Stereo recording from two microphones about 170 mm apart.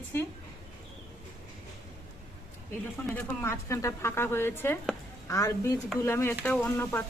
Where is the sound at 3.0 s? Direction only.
10° left (ahead or behind).